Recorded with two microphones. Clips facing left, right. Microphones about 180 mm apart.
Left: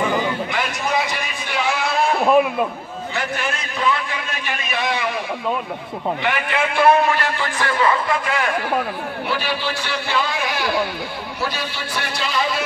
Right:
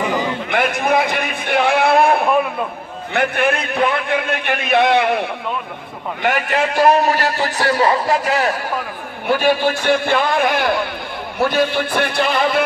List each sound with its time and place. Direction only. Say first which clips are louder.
0.5 s a sound: right 6 dB; 55° right (ahead or behind)
3.1 s a man's voice: right 8 dB; 60° right (ahead or behind)
6.2 s a man's voice: right 7 dB; 40° right (ahead or behind); by 12.6 s 55° right (ahead or behind)